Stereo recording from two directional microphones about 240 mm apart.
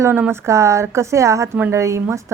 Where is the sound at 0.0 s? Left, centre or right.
Centre.